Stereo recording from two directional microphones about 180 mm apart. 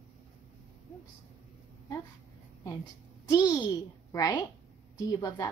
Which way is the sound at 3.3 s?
20° left (ahead or behind).